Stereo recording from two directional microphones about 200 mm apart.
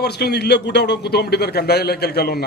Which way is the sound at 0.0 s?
55° left (ahead or behind).